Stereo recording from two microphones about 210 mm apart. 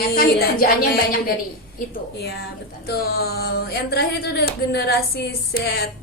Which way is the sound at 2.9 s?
45° left (ahead or behind).